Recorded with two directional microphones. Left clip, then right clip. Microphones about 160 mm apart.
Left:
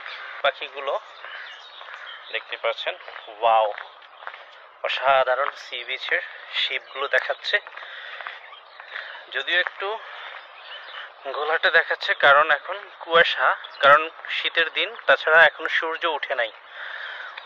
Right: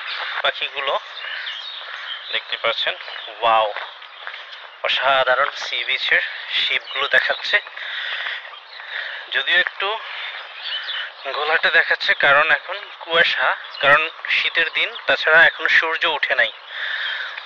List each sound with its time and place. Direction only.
0.4 s speech: 5° left (ahead or behind)
2.3 s speech: 10° left (ahead or behind)
4.8 s a man's voice: 15° left (ahead or behind)
9.8 s a sound: 20° left (ahead or behind)
11.2 s speech: 20° left (ahead or behind)
12.7 s speech: 35° left (ahead or behind)
15.0 s speech: 25° left (ahead or behind)